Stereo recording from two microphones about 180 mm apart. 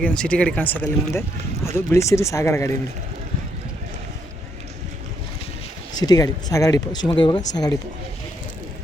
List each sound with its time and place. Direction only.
0.0 s speech: 5° left (ahead or behind)
6.0 s speech: 20° left (ahead or behind)